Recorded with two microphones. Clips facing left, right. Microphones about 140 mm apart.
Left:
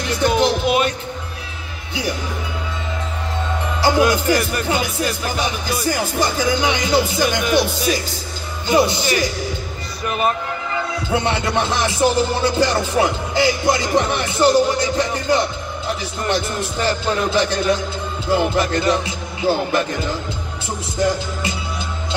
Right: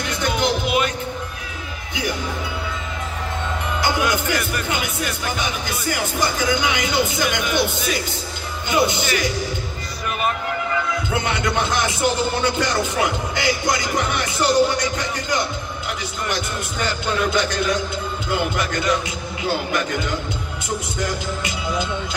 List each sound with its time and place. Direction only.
0.2 s music: 30° left (ahead or behind)
3.8 s speech: 35° left (ahead or behind)
8.6 s speech: 35° left (ahead or behind)
11.1 s music: 30° left (ahead or behind)
15.9 s speech: 30° left (ahead or behind)